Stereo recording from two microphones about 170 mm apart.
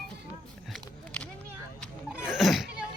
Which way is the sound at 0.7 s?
5° left (ahead or behind).